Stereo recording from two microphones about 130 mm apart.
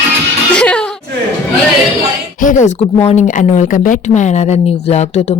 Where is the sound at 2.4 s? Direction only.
80° left; by 3.2 s 60° left (ahead or behind).